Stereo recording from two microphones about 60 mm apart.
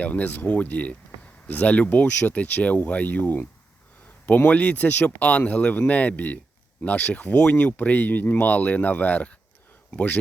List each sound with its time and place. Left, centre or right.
0.0 s speech: left
4.4 s speech: left